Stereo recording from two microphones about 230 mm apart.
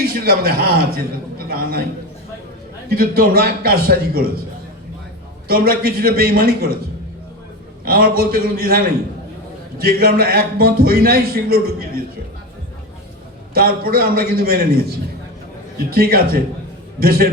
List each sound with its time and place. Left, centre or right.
0.1 s a man's voice: right
2.9 s a man's voice: right
5.5 s a man's voice: right
7.9 s a man's voice: right
13.5 s a man's voice: right